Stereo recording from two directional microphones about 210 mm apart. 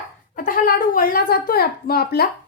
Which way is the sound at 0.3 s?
40° left (ahead or behind).